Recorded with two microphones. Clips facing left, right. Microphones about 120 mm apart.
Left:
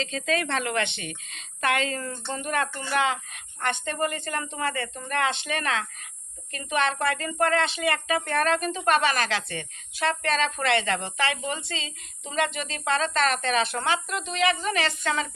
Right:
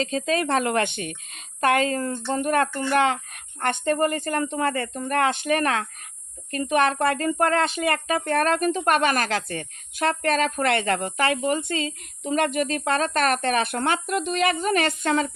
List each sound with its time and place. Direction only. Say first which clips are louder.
0.0 s speech: right 4 dB; 40° right (ahead or behind)